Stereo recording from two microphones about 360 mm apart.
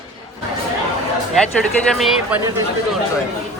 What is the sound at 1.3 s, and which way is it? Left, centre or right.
Speech, centre.